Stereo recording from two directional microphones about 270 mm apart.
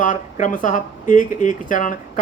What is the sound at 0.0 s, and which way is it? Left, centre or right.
A woman's voice, left.